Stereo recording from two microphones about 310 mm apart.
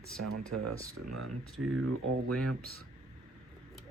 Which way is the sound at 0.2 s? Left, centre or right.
Right.